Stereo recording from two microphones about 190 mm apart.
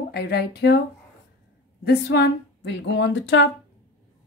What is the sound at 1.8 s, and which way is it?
A woman's voice, 60° left (ahead or behind).